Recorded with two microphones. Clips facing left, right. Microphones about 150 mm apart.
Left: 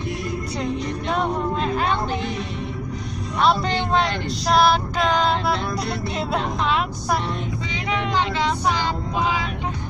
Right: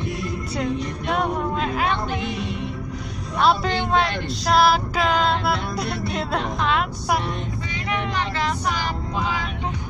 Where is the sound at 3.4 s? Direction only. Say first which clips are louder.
Even; 5° right (ahead or behind).